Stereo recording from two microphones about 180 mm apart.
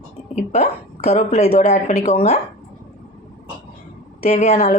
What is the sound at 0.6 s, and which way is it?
Speech, 55° left (ahead or behind).